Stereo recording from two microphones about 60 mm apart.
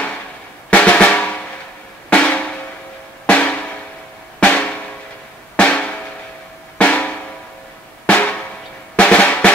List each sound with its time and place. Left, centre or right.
0.7 s drum: centre